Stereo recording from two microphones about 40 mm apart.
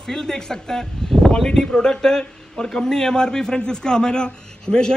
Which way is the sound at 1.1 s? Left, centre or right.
Centre.